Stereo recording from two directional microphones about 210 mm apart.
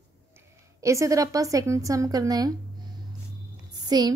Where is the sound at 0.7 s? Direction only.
15° right (ahead or behind).